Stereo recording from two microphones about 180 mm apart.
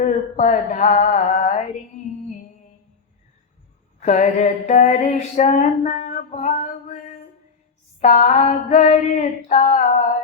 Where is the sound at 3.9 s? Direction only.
40° left (ahead or behind).